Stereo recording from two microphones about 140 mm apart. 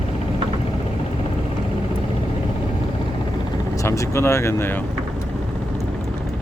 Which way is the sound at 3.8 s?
20° left (ahead or behind).